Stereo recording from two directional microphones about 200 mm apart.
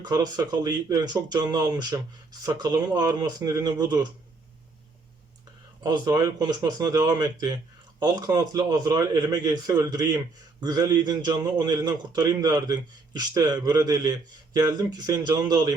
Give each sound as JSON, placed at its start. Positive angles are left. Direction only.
{"t": 0.0, "sound": "a man's voice", "side_deg": -20}
{"t": 5.8, "sound": "a man's voice", "side_deg": -15}